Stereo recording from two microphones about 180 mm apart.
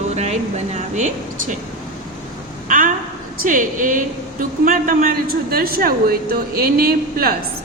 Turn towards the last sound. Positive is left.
turn(degrees=-55)  # may be behind; listen again after turning